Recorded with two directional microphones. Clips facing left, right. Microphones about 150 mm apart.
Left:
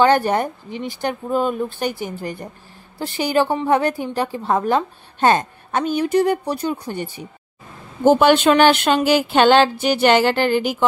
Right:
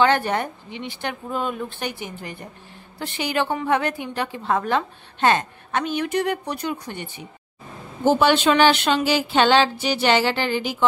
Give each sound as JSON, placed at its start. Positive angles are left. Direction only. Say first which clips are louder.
{"t": 0.0, "sound": "a woman's voice", "louder": "left 4 dB", "side_deg": 40}
{"t": 8.0, "sound": "speech", "louder": "left 4 dB", "side_deg": 50}